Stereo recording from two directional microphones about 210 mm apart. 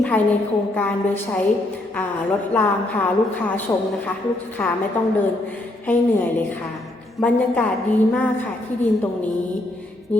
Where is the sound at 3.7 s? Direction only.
10° left (ahead or behind).